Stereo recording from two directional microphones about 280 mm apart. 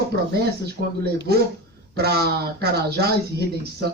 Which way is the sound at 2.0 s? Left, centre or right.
Right.